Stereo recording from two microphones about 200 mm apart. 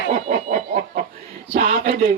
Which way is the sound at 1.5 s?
40° right (ahead or behind).